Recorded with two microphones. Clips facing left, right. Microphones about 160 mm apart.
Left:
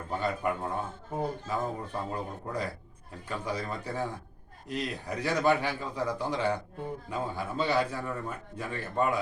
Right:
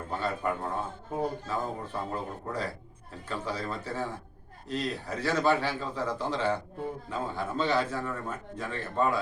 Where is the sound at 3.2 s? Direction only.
15° left (ahead or behind).